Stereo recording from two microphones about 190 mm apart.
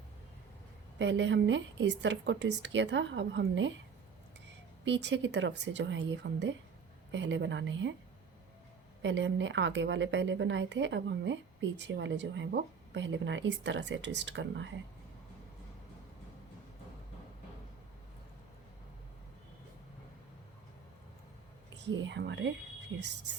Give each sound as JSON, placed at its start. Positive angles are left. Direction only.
{"t": 0.9, "sound": "speech", "side_deg": -70}
{"t": 4.9, "sound": "speech", "side_deg": -70}
{"t": 9.0, "sound": "speech", "side_deg": -70}
{"t": 21.8, "sound": "speech", "side_deg": -70}